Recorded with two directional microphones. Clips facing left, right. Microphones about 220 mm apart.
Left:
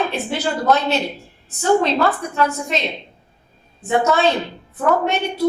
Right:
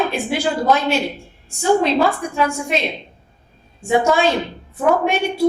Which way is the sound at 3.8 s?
10° right (ahead or behind).